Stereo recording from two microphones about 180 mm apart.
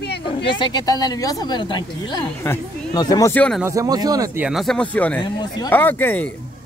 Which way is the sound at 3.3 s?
5° left (ahead or behind).